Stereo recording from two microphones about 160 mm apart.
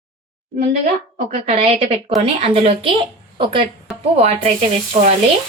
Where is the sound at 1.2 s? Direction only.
40° right (ahead or behind).